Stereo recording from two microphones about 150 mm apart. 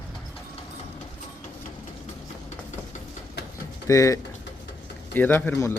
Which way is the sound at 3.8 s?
20° left (ahead or behind).